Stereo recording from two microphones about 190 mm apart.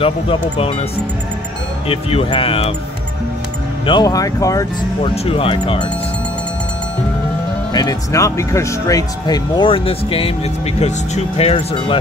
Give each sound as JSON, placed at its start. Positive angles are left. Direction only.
{"t": 0.0, "sound": "speech", "side_deg": 30}
{"t": 1.9, "sound": "speech", "side_deg": 30}
{"t": 3.8, "sound": "speech", "side_deg": 20}
{"t": 5.1, "sound": "speech", "side_deg": 30}
{"t": 7.7, "sound": "speech", "side_deg": 20}